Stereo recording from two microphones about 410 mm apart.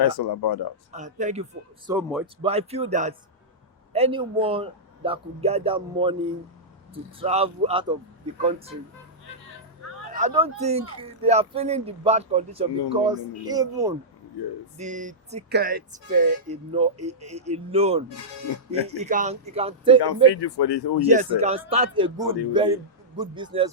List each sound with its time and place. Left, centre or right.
0.2 s speech: left
0.9 s speech: centre
1.9 s a man's voice: centre
2.2 s speech: centre
7.2 s speech: centre
10.1 s speech: centre
20.3 s speech: left
21.1 s speech: centre